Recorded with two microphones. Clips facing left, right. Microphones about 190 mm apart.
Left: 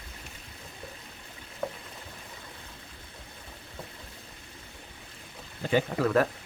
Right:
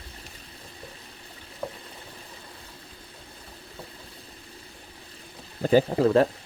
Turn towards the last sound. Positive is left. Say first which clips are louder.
# right 5 dB
turn(degrees=-30)  # may be behind; listen again after turning